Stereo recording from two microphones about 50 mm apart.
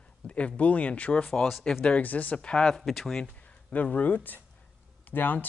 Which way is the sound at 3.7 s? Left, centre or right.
Left.